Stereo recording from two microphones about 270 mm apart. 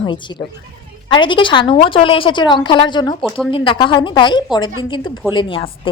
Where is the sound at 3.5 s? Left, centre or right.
Centre.